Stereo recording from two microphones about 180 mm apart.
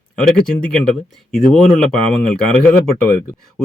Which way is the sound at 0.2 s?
5° left (ahead or behind).